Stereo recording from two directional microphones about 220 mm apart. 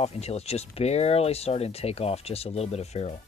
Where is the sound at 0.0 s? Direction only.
30° left (ahead or behind).